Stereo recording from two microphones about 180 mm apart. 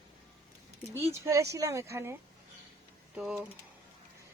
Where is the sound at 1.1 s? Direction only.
15° right (ahead or behind).